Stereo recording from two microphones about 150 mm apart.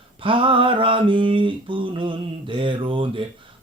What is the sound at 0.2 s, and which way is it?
Mantra, 35° right (ahead or behind).